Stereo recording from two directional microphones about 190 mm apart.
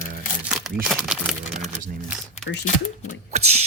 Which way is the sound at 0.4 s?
Centre (ahead or behind).